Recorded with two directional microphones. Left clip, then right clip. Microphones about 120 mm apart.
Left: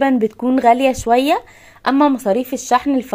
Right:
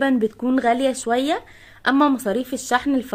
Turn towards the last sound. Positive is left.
turn(degrees=20)  # may be behind; listen again after turning